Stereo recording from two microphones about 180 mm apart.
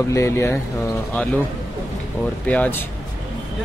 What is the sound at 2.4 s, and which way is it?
Speech, 10° left (ahead or behind).